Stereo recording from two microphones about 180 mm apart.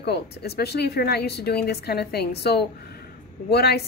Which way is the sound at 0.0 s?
65° left (ahead or behind).